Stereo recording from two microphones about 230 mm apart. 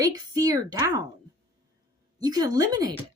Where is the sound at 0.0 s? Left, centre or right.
Centre.